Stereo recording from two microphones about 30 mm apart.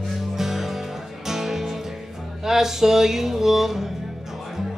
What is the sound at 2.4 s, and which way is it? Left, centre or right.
Speech, centre.